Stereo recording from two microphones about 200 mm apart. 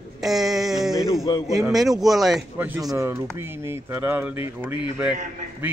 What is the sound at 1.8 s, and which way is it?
Speech, centre (ahead or behind).